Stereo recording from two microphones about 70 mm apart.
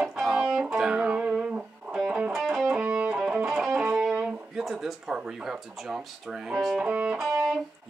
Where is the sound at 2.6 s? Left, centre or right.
Centre.